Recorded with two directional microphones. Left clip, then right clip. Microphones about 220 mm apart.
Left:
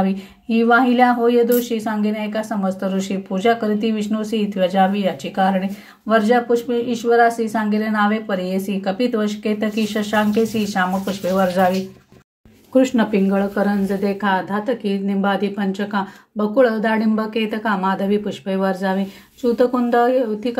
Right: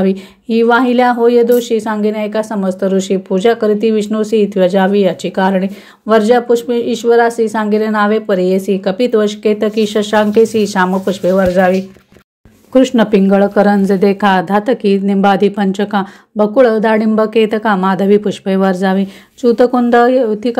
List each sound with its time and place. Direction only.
0.0 s a woman's voice: 40° right (ahead or behind)
11.3 s speech: 20° right (ahead or behind)
12.7 s a woman's voice: 30° right (ahead or behind)